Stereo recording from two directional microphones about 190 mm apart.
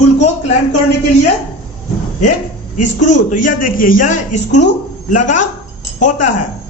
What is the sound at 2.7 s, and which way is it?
A man's voice, 40° left (ahead or behind).